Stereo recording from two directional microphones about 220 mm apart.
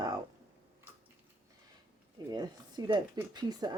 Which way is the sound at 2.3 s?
20° right (ahead or behind).